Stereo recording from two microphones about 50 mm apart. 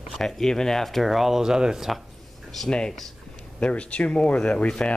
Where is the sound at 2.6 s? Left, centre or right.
Centre.